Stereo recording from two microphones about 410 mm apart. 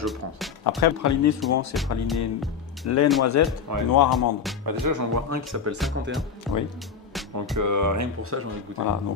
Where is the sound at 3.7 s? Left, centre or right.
Right.